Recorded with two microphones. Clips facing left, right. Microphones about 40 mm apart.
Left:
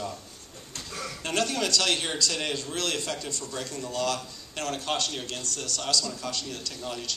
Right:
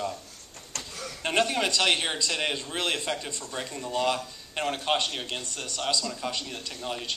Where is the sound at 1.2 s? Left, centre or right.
Right.